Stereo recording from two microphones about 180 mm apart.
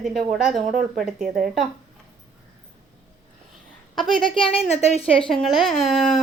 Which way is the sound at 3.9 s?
Centre (ahead or behind).